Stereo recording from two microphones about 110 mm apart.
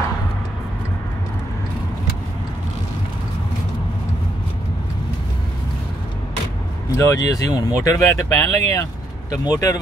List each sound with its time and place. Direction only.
7.0 s speech: 30° left (ahead or behind)